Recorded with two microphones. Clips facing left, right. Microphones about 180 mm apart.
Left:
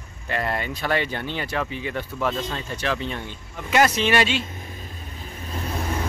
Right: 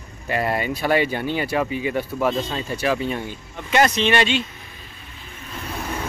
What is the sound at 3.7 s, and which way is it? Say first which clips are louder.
Speech: right 1 dB; 5° left (ahead or behind).